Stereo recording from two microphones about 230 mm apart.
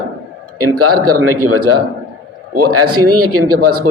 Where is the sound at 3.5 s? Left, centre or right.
Right.